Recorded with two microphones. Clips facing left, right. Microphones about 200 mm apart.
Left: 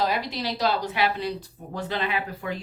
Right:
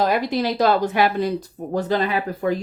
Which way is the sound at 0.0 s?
50° right (ahead or behind).